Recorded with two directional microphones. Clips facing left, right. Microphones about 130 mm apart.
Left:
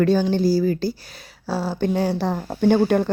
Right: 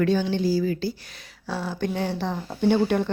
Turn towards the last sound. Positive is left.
turn(degrees=45)  # may be behind; listen again after turning